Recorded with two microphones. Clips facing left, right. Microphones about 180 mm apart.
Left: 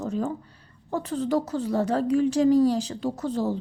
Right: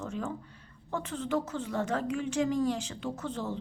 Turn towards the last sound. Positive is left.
turn(degrees=35)  # may be behind; listen again after turning